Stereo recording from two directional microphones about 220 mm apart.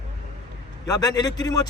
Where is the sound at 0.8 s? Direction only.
15° left (ahead or behind).